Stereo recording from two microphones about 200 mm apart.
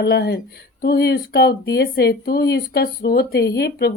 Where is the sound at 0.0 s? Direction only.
55° left (ahead or behind).